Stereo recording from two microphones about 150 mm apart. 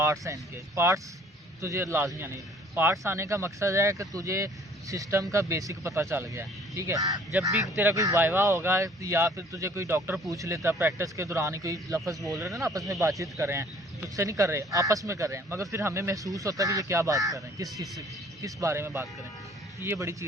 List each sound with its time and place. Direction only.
0.0 s a man's voice: 20° right (ahead or behind)